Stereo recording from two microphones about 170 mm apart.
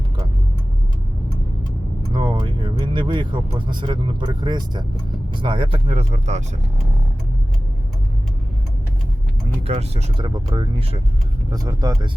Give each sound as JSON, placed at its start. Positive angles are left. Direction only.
{"t": 2.1, "sound": "speech", "side_deg": -30}
{"t": 9.6, "sound": "speech", "side_deg": -40}